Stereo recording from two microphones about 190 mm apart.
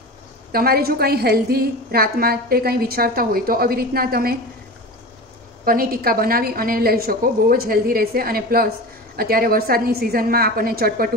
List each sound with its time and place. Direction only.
0.5 s a woman's voice: 50° right (ahead or behind)
5.7 s a woman's voice: 50° right (ahead or behind)